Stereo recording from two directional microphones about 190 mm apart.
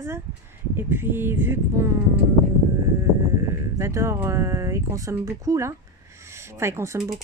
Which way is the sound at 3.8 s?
15° right (ahead or behind).